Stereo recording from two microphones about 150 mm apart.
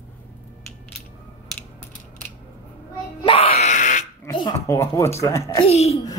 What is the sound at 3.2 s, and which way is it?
Music, 35° left (ahead or behind).